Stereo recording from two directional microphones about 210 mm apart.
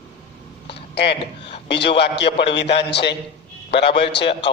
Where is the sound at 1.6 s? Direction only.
55° left (ahead or behind).